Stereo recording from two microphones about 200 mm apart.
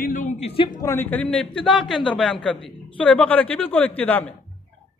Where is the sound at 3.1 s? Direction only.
5° left (ahead or behind).